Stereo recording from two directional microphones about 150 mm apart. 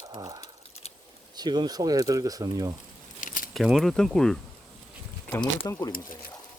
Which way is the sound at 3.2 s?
60° left (ahead or behind).